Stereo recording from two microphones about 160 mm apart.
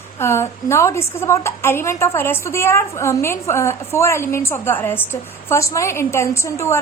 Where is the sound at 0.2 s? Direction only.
15° left (ahead or behind).